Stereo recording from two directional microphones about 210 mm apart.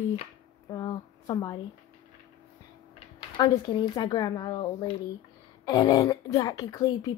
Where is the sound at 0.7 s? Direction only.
15° left (ahead or behind).